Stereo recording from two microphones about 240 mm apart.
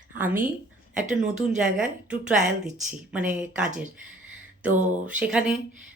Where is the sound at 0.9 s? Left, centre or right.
Right.